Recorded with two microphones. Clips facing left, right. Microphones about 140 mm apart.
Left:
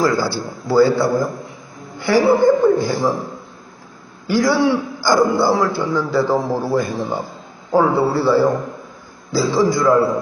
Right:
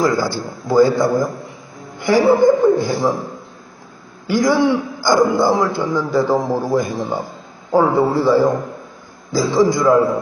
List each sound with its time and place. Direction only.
0.0 s a man's voice: 15° right (ahead or behind)
4.3 s a man's voice: 15° right (ahead or behind)